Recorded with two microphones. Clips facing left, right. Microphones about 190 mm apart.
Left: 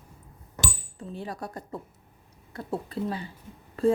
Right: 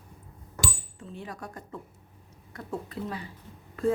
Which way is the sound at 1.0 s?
35° left (ahead or behind).